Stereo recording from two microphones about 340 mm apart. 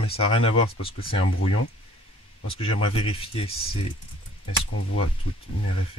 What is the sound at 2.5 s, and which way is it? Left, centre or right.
Speech, centre.